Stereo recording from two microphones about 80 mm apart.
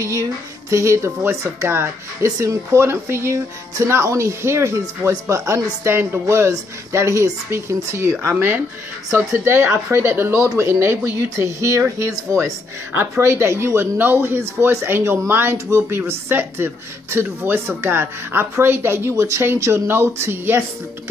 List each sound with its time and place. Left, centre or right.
0.0 s speech: right